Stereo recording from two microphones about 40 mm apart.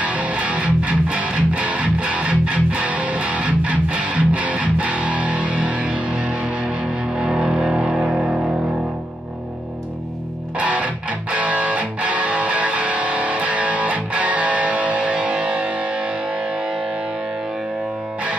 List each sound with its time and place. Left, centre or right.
0.0 s music: right
7.2 s music: right
10.6 s music: right